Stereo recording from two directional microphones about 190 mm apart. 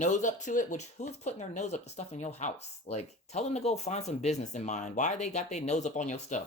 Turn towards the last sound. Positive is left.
turn(degrees=40)  # may be behind; listen again after turning